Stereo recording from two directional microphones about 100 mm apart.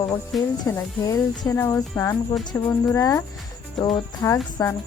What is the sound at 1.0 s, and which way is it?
Speech, 30° left (ahead or behind).